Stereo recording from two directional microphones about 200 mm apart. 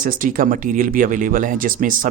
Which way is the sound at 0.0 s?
45° right (ahead or behind).